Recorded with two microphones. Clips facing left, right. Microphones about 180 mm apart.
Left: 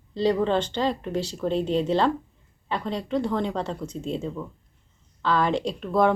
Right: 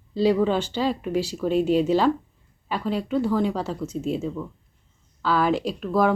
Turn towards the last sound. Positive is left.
turn(degrees=-5)  # may be behind; listen again after turning